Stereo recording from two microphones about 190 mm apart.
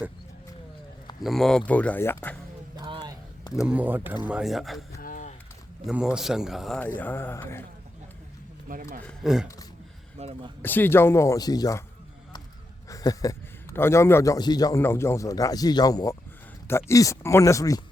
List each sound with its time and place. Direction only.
1.2 s a man's voice: centre (ahead or behind)
2.7 s a sound: 25° right (ahead or behind)
3.5 s speech: 5° right (ahead or behind)
4.9 s a sound: 45° left (ahead or behind)
5.8 s speech: 5° right (ahead or behind)
7.0 s a man's voice: 10° left (ahead or behind)
8.6 s speech: 45° right (ahead or behind)
9.0 s speech: centre (ahead or behind)
10.2 s speech: 30° right (ahead or behind)
10.6 s a man's voice: 10° left (ahead or behind)
12.9 s a man's voice: 20° left (ahead or behind)